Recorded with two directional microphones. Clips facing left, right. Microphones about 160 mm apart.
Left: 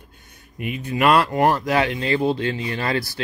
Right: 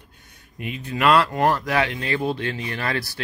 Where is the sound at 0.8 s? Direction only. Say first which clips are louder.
Left 1 dB; 20° left (ahead or behind).